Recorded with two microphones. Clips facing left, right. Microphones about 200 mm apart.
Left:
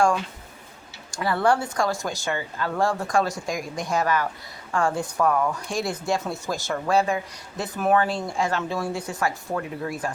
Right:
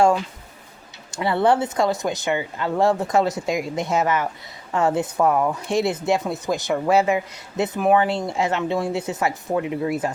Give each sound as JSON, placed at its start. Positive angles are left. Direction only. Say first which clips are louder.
{"t": 1.1, "sound": "speech", "louder": "right 3 dB", "side_deg": -25}